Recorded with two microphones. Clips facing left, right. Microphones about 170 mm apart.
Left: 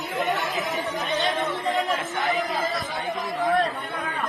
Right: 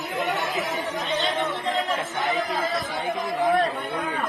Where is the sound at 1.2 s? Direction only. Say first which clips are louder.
Left 1 dB; 20° left (ahead or behind).